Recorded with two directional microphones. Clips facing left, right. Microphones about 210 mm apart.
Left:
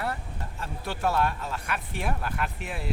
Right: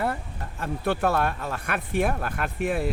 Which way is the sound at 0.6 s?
55° right (ahead or behind).